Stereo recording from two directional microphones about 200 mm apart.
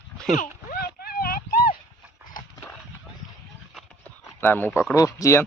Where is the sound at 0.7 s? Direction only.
50° left (ahead or behind).